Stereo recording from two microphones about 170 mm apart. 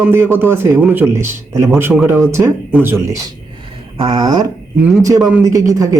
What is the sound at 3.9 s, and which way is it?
Speech, 30° right (ahead or behind).